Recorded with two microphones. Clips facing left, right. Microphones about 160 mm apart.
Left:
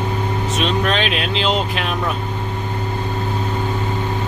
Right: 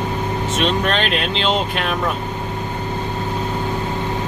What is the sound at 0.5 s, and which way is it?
Speech, centre (ahead or behind).